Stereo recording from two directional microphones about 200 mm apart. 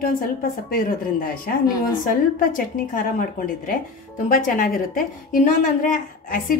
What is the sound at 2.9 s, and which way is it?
A woman's voice, 45° left (ahead or behind).